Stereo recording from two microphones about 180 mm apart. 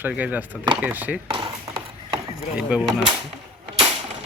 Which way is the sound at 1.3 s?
25° right (ahead or behind).